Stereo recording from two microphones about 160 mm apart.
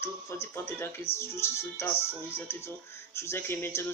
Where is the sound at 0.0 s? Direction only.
15° left (ahead or behind).